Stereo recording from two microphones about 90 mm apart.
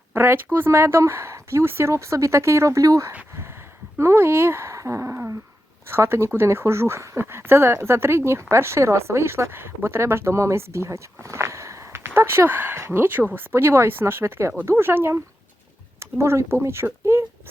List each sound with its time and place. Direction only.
0.1 s speech: 25° right (ahead or behind)